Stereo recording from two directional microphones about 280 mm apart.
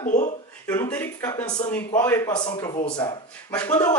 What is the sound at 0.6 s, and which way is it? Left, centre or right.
Speech, centre.